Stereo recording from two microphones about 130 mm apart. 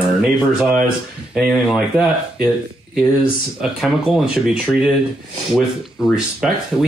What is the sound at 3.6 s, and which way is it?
Speech, 5° right (ahead or behind).